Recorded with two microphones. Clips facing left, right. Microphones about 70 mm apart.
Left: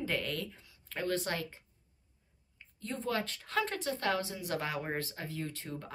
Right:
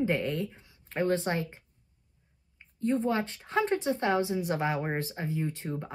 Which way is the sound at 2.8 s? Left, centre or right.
Right.